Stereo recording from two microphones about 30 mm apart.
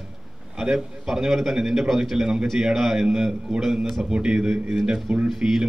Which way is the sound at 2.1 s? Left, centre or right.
Right.